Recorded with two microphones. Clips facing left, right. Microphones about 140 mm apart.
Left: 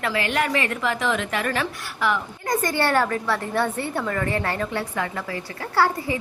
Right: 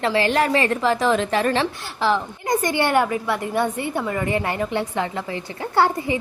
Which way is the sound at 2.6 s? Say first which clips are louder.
Right 2 dB; 15° right (ahead or behind).